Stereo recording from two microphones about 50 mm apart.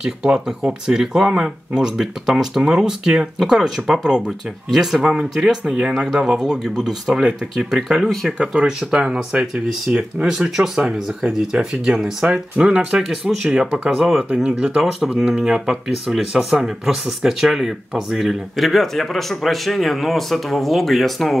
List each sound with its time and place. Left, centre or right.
0.0 s speech: centre
4.7 s a man's voice: centre
14.3 s speech: centre
14.8 s a man's voice: centre
15.2 s a man's voice: centre